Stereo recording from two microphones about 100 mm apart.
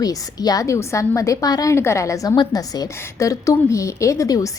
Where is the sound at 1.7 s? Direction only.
25° left (ahead or behind).